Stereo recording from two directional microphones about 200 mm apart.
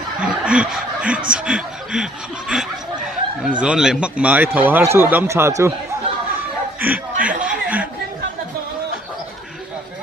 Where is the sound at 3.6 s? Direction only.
5° right (ahead or behind).